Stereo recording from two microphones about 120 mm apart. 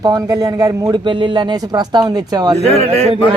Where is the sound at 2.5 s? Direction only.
60° left (ahead or behind).